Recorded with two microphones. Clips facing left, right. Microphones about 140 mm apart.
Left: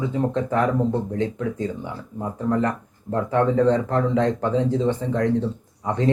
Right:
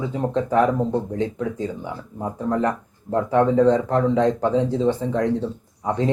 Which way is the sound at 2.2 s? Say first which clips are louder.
Even; 10° right (ahead or behind).